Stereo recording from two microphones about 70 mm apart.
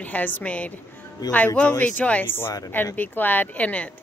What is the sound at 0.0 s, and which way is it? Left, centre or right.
A woman's voice, left.